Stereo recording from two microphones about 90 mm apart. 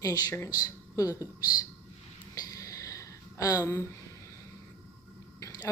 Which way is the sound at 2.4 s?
40° left (ahead or behind).